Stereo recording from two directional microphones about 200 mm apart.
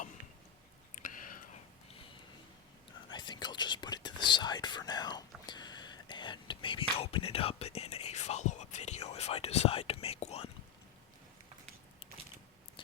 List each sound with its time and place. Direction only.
1.0 s whispering: 40° left (ahead or behind)
3.1 s whispering: 20° left (ahead or behind)